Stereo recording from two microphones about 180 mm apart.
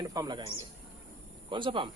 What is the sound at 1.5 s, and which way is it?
Speech, 25° right (ahead or behind).